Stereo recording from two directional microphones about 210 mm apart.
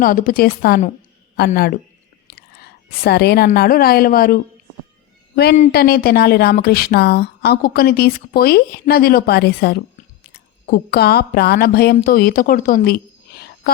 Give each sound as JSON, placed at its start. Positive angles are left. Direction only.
{"t": 0.0, "sound": "a woman's voice", "side_deg": 40}